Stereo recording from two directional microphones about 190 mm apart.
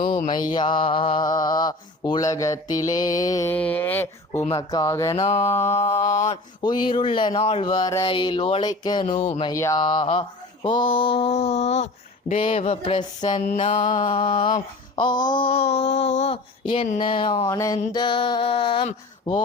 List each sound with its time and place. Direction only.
0.2 s mantra: 20° left (ahead or behind)
5.2 s mantra: 35° left (ahead or behind)
6.6 s mantra: 25° left (ahead or behind)
9.0 s mantra: 35° left (ahead or behind)
9.5 s mantra: 15° left (ahead or behind)
13.4 s mantra: 35° left (ahead or behind)
14.1 s mantra: 30° left (ahead or behind)